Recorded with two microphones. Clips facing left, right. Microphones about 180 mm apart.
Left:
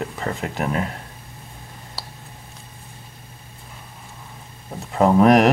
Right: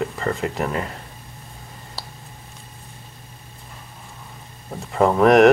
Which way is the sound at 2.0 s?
Centre (ahead or behind).